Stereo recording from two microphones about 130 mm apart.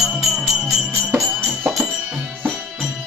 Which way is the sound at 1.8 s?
15° right (ahead or behind).